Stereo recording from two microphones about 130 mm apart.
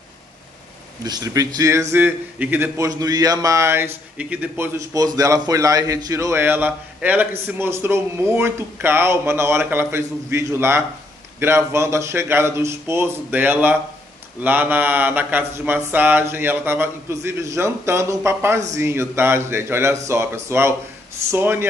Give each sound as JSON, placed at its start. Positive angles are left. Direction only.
{"t": 1.0, "sound": "a man's voice", "side_deg": -30}
{"t": 2.9, "sound": "a man's voice", "side_deg": -30}
{"t": 4.7, "sound": "a man's voice", "side_deg": -30}
{"t": 14.4, "sound": "a sound", "side_deg": -15}
{"t": 18.7, "sound": "a man's voice", "side_deg": -20}
{"t": 21.3, "sound": "a sound", "side_deg": -20}